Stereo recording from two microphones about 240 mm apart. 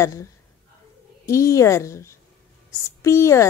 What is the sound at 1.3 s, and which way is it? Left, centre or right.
Owl, centre.